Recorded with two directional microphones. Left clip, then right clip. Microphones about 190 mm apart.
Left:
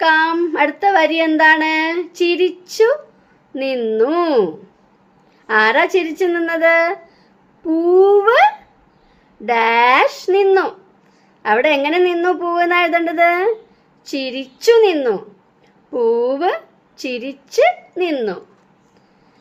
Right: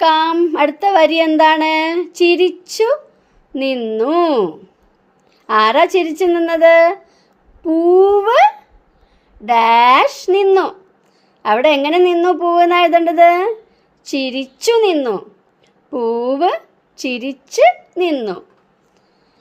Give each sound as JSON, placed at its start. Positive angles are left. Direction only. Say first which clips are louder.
{"t": 0.0, "sound": "speech", "louder": "right 2 dB", "side_deg": -35}